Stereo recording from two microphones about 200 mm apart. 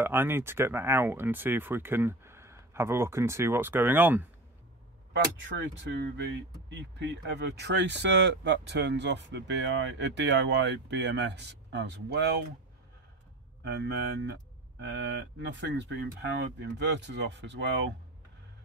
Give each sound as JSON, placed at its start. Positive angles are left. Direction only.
{"t": 0.0, "sound": "speech", "side_deg": -10}
{"t": 5.9, "sound": "speech", "side_deg": -55}
{"t": 13.7, "sound": "speech", "side_deg": -55}